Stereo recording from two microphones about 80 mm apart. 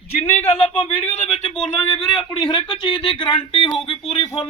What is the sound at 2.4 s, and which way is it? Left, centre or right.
Speech, left.